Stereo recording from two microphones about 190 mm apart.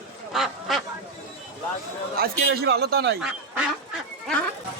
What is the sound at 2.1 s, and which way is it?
A man's voice, 55° right (ahead or behind).